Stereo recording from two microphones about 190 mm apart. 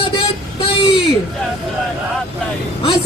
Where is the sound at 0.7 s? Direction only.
30° left (ahead or behind).